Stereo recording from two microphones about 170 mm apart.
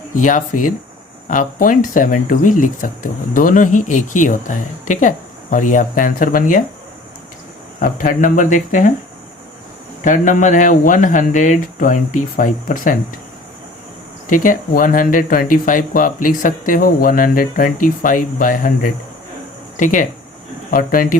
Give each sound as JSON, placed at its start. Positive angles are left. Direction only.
{"t": 0.2, "sound": "speech", "side_deg": 50}
{"t": 7.8, "sound": "speech", "side_deg": 55}
{"t": 10.0, "sound": "speech", "side_deg": 50}
{"t": 14.3, "sound": "speech", "side_deg": 50}